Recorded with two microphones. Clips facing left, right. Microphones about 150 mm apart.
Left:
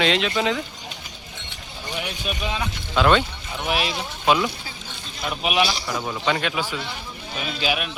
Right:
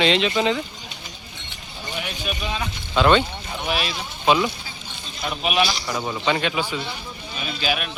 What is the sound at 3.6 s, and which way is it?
Speech, 15° left (ahead or behind).